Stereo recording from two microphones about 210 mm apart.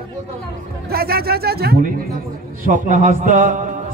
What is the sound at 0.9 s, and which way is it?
Mantra, 45° right (ahead or behind).